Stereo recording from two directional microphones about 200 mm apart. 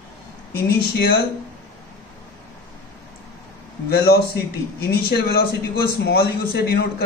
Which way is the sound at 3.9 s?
55° left (ahead or behind).